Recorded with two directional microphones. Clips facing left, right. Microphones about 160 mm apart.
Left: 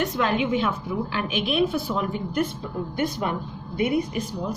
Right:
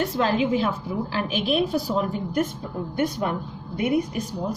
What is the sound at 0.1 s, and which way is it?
A woman's voice, 30° right (ahead or behind).